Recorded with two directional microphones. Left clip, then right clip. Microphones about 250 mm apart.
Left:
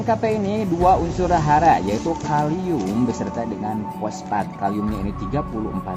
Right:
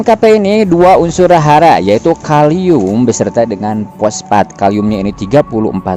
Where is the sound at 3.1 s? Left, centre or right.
Right.